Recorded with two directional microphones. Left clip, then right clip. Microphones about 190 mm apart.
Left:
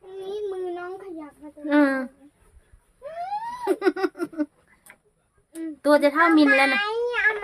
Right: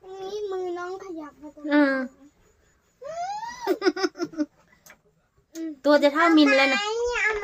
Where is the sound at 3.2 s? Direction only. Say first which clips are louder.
Left 2 dB; 5° left (ahead or behind).